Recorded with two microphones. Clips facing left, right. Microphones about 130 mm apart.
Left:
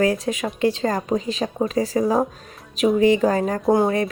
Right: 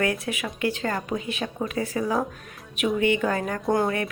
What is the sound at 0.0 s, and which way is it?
A woman's voice, 35° left (ahead or behind).